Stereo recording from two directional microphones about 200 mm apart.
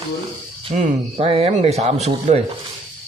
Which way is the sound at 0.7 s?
35° right (ahead or behind).